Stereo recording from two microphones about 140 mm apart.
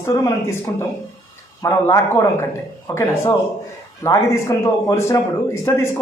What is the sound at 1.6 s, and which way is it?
Speech, 20° left (ahead or behind).